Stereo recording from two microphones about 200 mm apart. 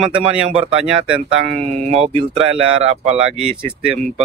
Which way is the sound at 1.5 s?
35° right (ahead or behind).